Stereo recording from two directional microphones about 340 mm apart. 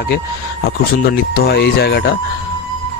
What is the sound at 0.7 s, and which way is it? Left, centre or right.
A man's voice, left.